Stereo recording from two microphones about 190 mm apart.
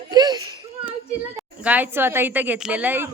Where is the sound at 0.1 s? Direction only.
20° right (ahead or behind).